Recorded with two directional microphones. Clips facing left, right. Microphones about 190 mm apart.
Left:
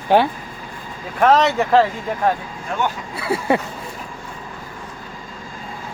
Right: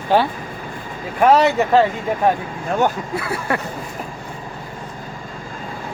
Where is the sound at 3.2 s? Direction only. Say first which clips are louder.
Left 7 dB; 25° left (ahead or behind).